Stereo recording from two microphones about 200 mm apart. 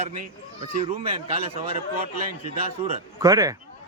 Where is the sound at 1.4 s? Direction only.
30° right (ahead or behind).